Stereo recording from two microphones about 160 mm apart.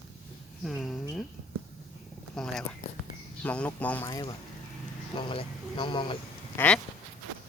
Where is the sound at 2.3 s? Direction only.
5° left (ahead or behind).